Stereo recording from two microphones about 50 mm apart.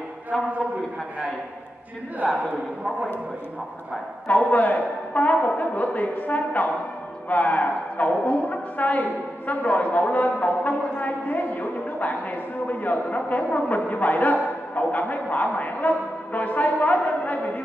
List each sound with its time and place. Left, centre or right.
4.3 s a man's voice: left